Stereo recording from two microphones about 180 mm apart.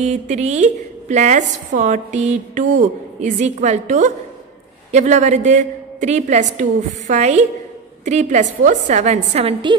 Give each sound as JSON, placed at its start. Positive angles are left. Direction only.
{"t": 0.0, "sound": "a woman's voice", "side_deg": -40}